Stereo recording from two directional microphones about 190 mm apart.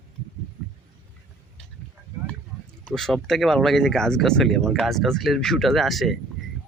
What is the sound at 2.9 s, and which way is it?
Speech, centre (ahead or behind).